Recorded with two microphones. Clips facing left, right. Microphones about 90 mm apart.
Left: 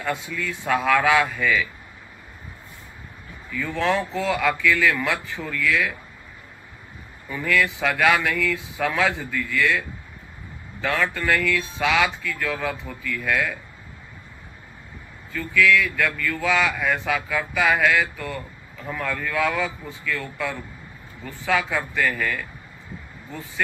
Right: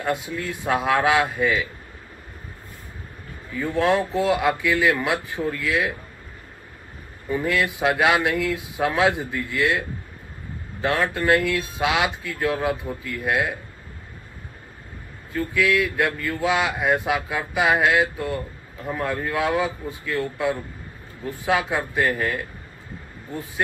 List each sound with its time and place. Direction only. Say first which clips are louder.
0.0 s speech: right 2 dB; 20° right (ahead or behind)
3.5 s speech: right 3 dB; 20° right (ahead or behind)
7.2 s speech: even; 20° right (ahead or behind)
15.3 s speech: left 1 dB; 20° right (ahead or behind)
21.3 s speech: right 1 dB; 20° right (ahead or behind)